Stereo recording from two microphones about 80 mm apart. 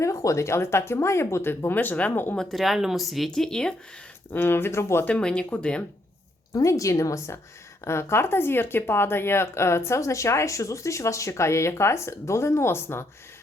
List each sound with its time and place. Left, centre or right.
0.0 s speech: left
2.3 s speech: centre
4.3 s speech: left
5.0 s speech: centre
6.5 s a woman's voice: left